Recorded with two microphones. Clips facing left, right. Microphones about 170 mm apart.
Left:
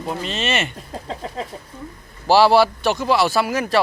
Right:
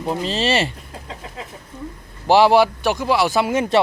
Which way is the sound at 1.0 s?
35° left (ahead or behind).